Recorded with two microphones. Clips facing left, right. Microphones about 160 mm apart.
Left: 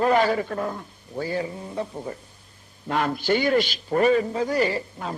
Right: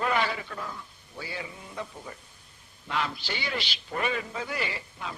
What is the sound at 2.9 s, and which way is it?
A man's voice, 50° left (ahead or behind).